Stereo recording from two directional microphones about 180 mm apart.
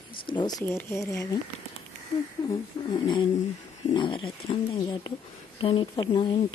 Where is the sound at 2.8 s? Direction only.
25° left (ahead or behind).